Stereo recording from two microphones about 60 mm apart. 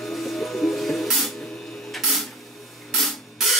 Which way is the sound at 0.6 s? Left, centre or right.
Centre.